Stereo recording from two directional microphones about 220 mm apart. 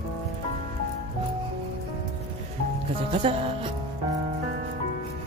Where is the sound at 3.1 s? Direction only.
25° right (ahead or behind).